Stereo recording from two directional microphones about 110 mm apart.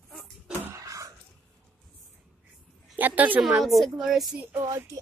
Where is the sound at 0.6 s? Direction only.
30° right (ahead or behind).